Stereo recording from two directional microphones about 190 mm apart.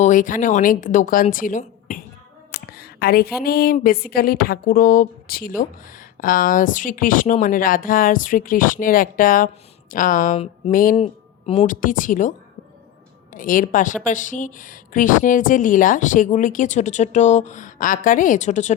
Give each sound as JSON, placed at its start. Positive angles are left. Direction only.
{"t": 0.0, "sound": "speech", "side_deg": 40}
{"t": 2.7, "sound": "a sound", "side_deg": 55}
{"t": 3.4, "sound": "speech", "side_deg": 55}
{"t": 11.7, "sound": "speech", "side_deg": 45}
{"t": 13.3, "sound": "speech", "side_deg": 45}